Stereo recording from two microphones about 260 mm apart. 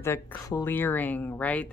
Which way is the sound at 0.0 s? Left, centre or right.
Centre.